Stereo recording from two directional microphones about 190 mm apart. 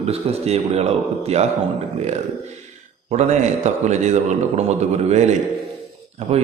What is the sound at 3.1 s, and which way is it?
A man's voice, 35° right (ahead or behind).